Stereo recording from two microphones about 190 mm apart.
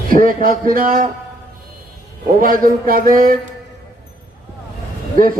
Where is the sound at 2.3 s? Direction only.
50° right (ahead or behind).